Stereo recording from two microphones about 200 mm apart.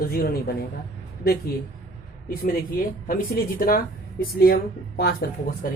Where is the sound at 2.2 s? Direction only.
45° left (ahead or behind).